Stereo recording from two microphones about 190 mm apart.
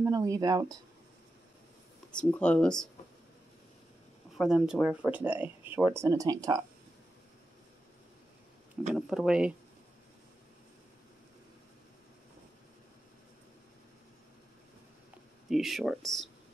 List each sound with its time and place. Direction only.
0.0 s speech: 15° right (ahead or behind)
2.0 s speech: 5° left (ahead or behind)
4.4 s speech: 5° right (ahead or behind); by 6.6 s 20° right (ahead or behind)
8.9 s speech: 5° right (ahead or behind)
15.5 s speech: centre (ahead or behind)